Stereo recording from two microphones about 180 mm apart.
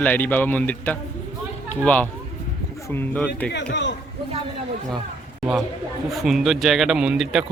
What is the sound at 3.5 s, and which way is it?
Speech, 70° left (ahead or behind).